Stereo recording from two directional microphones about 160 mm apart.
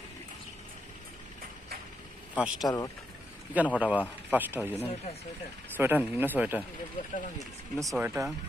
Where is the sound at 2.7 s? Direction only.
25° left (ahead or behind).